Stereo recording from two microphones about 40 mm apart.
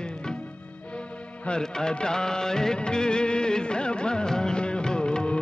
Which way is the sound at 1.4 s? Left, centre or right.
Left.